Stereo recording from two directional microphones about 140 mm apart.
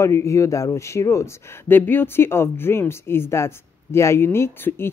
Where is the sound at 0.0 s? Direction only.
20° left (ahead or behind).